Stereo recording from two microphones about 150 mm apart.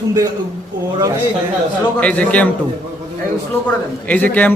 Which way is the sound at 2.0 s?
10° left (ahead or behind).